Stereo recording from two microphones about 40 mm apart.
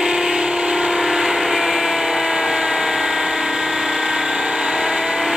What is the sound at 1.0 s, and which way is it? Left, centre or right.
Vehicle, centre.